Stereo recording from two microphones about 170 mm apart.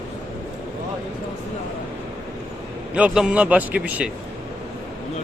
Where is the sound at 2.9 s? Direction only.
5° right (ahead or behind).